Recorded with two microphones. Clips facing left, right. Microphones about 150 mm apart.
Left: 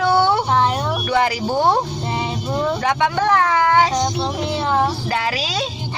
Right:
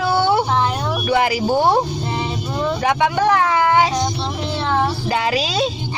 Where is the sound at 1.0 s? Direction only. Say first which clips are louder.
Right 3 dB; 10° right (ahead or behind).